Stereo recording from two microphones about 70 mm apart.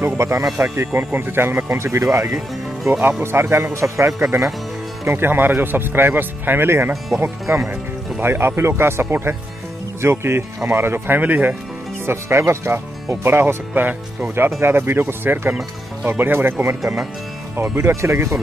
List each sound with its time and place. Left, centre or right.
0.2 s speech: right
5.0 s speech: right
12.1 s speech: right